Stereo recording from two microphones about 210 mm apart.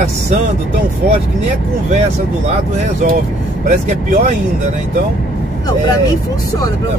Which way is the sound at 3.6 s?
40° right (ahead or behind).